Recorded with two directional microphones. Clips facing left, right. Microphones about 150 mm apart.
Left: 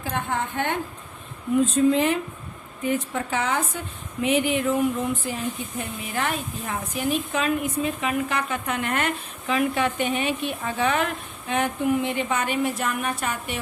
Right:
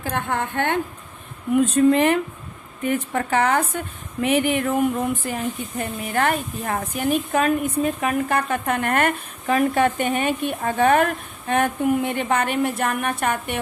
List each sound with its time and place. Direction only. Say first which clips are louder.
0.0 s a woman's voice: right 2 dB; 55° right (ahead or behind)